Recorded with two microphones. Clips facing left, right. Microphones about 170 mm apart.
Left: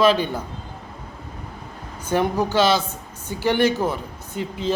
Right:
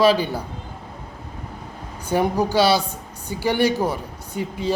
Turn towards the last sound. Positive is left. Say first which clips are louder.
# right 1 dB
turn(degrees=-15)  # may be behind; listen again after turning